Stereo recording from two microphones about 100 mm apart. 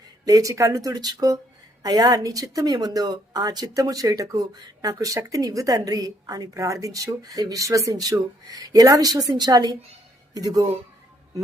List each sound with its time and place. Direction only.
0.3 s speech: 35° right (ahead or behind)